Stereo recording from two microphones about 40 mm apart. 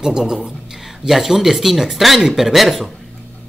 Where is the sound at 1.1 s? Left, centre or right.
Centre.